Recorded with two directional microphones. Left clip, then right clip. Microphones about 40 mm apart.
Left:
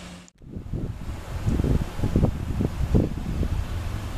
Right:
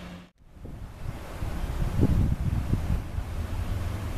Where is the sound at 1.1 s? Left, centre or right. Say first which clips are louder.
Left 7 dB; centre.